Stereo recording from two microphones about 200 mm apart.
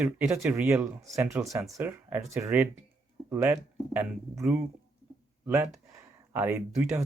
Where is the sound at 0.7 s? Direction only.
15° right (ahead or behind).